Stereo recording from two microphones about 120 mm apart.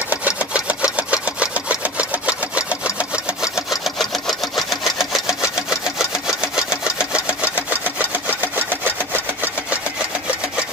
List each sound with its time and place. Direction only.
0.1 s a sound: 10° right (ahead or behind)
3.5 s sewing machine: centre (ahead or behind)
8.5 s wood: 15° right (ahead or behind)